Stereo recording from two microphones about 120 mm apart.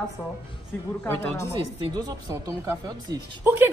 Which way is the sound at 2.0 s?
35° right (ahead or behind).